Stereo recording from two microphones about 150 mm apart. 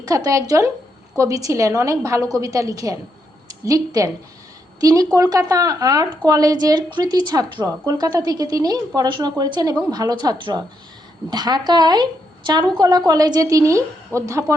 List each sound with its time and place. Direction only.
0.0 s a woman's voice: 25° right (ahead or behind)